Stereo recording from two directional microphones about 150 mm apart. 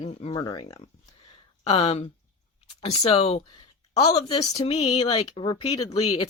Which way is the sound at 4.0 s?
25° left (ahead or behind).